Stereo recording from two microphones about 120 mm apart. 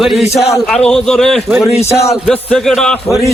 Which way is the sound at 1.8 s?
25° left (ahead or behind).